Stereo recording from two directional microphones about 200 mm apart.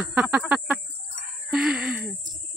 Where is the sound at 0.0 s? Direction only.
5° right (ahead or behind).